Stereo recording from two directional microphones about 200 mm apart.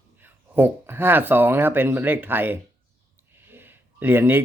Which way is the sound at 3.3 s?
10° right (ahead or behind).